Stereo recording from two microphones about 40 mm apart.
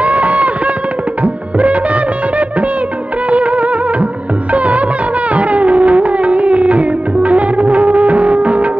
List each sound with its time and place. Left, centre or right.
0.0 s a sound: right
1.2 s music: right
3.3 s music: right